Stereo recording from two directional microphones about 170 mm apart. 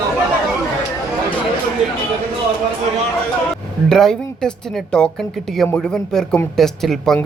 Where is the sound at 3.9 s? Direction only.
Centre (ahead or behind).